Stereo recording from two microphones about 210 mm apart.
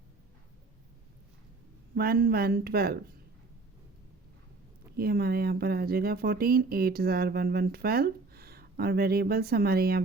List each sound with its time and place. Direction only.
2.0 s speech: 45° right (ahead or behind)
4.9 s speech: 50° right (ahead or behind)